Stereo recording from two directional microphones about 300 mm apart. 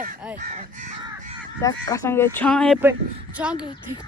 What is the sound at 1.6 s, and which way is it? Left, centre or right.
Speech, centre.